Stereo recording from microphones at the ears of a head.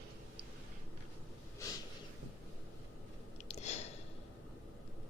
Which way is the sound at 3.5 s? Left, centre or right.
Left.